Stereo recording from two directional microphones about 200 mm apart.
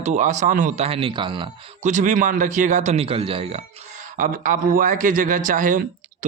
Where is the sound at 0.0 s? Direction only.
40° right (ahead or behind).